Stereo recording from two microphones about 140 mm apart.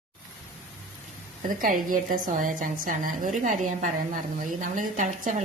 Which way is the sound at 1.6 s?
75° right (ahead or behind).